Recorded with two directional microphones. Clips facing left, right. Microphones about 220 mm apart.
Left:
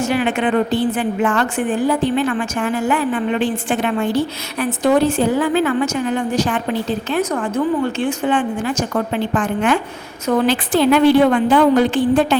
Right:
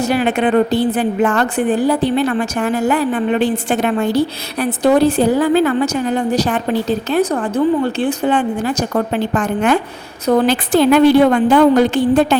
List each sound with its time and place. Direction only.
0.0 s a woman's voice: 40° right (ahead or behind)